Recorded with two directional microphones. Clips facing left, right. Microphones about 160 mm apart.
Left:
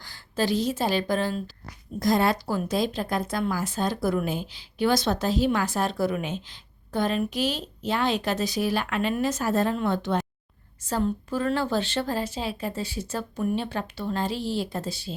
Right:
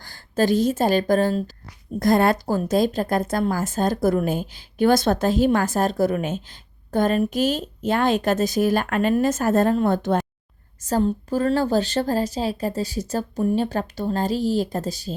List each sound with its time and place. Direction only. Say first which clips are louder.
0.0 s a woman's voice: right 6 dB; 50° right (ahead or behind)